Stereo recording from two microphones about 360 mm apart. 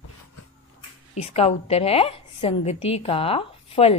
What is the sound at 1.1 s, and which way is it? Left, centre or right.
A woman's voice, centre.